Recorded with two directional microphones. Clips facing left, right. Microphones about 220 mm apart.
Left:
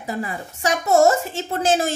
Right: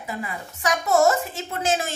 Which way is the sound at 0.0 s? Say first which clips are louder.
Left 4 dB; 35° left (ahead or behind).